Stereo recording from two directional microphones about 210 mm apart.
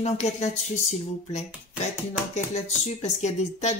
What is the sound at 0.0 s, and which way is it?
Speech, 30° left (ahead or behind).